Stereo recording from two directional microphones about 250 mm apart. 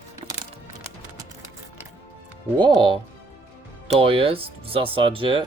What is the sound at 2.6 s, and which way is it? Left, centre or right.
Speech, centre.